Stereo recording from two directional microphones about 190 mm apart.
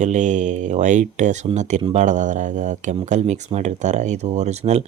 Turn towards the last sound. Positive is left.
turn(degrees=-35)  # may be behind; listen again after turning